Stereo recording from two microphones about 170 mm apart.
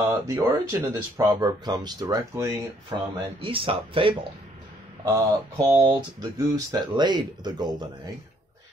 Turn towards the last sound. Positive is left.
turn(degrees=-25)  # may be behind; listen again after turning